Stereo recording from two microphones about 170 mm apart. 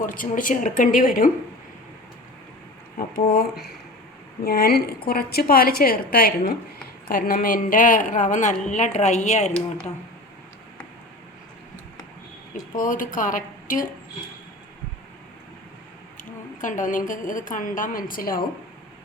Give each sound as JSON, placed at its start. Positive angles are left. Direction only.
{"t": 0.0, "sound": "a woman's voice", "side_deg": 50}
{"t": 4.4, "sound": "a woman's voice", "side_deg": 65}
{"t": 12.7, "sound": "a woman's voice", "side_deg": 50}
{"t": 16.6, "sound": "a woman's voice", "side_deg": 50}